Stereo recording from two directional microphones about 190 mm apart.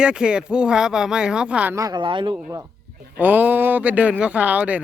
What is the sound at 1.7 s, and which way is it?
Speech, 20° right (ahead or behind).